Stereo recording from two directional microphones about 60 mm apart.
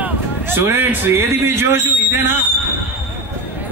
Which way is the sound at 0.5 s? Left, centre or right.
Right.